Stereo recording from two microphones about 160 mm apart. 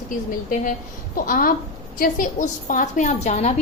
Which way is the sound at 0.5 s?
55° left (ahead or behind).